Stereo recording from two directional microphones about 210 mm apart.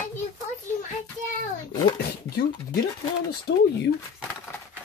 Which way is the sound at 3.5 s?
50° left (ahead or behind).